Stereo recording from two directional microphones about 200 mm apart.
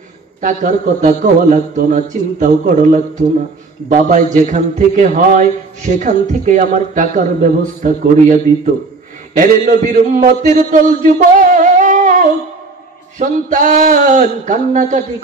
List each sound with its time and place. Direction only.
0.4 s a man's voice: 40° right (ahead or behind)